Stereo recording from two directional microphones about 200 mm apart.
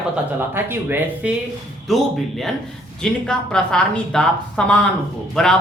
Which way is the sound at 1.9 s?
Centre (ahead or behind).